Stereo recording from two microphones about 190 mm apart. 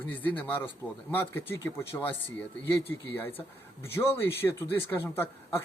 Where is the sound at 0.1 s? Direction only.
10° left (ahead or behind).